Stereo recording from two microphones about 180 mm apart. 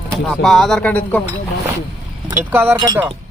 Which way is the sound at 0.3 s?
Centre (ahead or behind).